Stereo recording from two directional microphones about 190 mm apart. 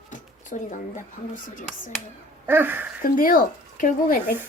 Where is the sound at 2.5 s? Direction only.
10° right (ahead or behind).